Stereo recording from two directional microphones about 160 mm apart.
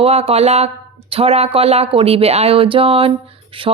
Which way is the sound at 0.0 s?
40° right (ahead or behind).